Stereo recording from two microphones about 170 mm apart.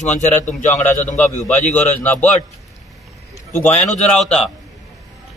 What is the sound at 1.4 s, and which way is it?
Speech, 5° left (ahead or behind).